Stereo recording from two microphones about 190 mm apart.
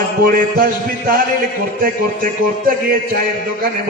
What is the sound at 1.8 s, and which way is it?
Mantra, 50° right (ahead or behind).